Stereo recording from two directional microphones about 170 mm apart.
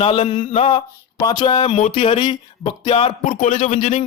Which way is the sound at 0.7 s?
25° left (ahead or behind).